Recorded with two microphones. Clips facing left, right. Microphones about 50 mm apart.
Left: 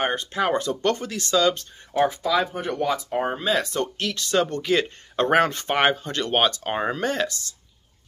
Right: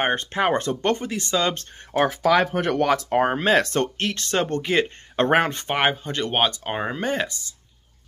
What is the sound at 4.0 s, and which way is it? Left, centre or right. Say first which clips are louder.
Speech: left 1 dB; right.